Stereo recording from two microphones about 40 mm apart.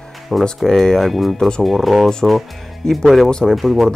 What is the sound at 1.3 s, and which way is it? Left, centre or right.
Speech, left.